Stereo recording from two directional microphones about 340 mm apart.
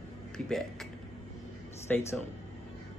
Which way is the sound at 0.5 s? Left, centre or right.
Centre.